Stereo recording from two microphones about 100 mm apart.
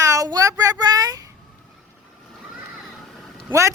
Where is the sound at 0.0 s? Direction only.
35° right (ahead or behind).